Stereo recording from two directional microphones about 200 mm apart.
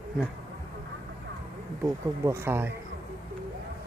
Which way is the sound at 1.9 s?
15° right (ahead or behind).